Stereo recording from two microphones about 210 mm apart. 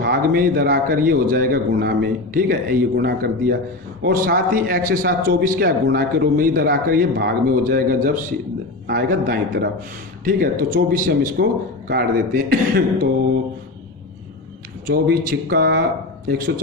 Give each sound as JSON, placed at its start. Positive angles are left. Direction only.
{"t": 0.0, "sound": "a man's voice", "side_deg": -45}
{"t": 14.8, "sound": "a man's voice", "side_deg": -40}